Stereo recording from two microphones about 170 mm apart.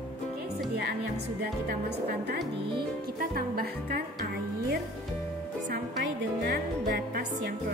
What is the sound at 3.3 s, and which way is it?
Music, 60° right (ahead or behind).